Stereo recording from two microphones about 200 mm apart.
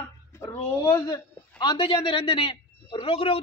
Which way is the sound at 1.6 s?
25° left (ahead or behind).